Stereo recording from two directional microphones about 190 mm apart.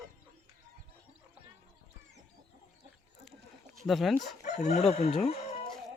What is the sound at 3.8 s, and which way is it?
Speech, centre (ahead or behind).